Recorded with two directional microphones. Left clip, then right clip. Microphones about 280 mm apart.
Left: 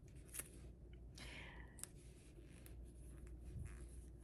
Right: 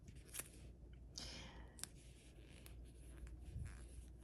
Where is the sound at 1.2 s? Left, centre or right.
Centre.